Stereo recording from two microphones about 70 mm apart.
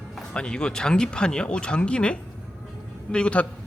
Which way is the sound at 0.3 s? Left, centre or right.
Centre.